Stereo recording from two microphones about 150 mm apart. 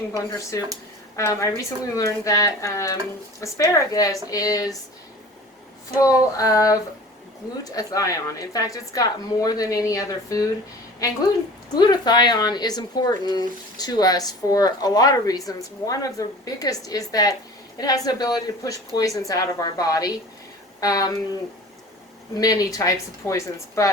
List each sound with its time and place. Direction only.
1.1 s speech: 20° left (ahead or behind)
6.0 s speech: 20° left (ahead or behind)
22.4 s speech: 25° left (ahead or behind)